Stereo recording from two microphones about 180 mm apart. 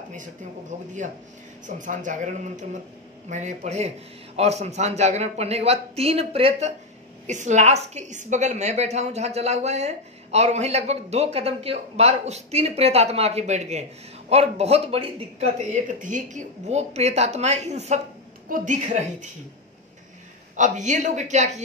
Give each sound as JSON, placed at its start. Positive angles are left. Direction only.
{"t": 0.1, "sound": "a woman's voice", "side_deg": -45}
{"t": 15.7, "sound": "a woman's voice", "side_deg": -45}
{"t": 20.5, "sound": "speech", "side_deg": -45}